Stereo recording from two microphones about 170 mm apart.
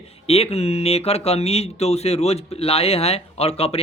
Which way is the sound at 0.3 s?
35° left (ahead or behind).